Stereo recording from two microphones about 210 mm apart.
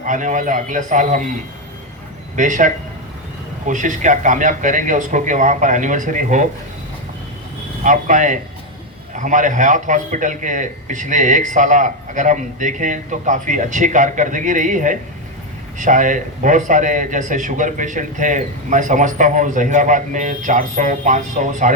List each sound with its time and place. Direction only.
0.0 s a man's voice: 35° right (ahead or behind)
7.9 s a man's voice: 35° right (ahead or behind)